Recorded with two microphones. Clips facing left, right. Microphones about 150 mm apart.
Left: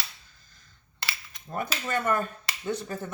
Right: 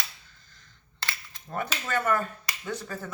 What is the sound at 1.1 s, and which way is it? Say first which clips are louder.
Speech: even; 15° left (ahead or behind).